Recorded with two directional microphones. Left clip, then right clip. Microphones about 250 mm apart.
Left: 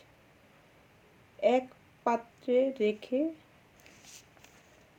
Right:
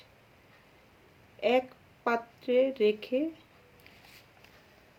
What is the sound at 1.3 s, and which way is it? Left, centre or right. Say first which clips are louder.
Speech: even; centre.